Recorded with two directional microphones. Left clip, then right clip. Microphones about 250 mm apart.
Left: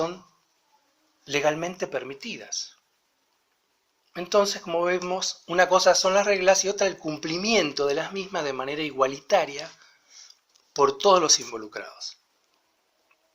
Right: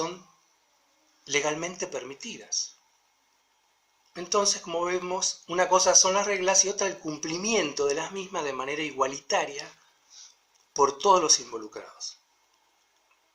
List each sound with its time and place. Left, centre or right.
1.3 s speech: centre
4.1 s speech: centre
11.1 s speech: centre
11.5 s speech: left